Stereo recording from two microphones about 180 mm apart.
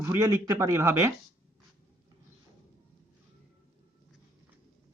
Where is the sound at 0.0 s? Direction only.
15° right (ahead or behind).